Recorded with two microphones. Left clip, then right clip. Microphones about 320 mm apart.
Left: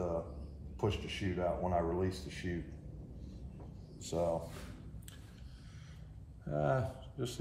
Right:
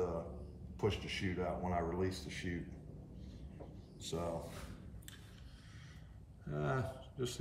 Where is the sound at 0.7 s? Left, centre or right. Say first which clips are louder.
Left 1 dB; centre.